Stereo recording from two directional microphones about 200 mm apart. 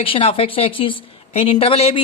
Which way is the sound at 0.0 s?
30° left (ahead or behind).